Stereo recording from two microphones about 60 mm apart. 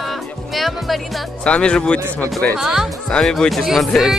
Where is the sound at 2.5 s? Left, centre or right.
Centre.